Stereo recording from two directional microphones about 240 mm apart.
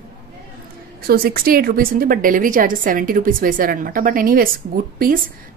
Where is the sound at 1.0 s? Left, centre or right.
Right.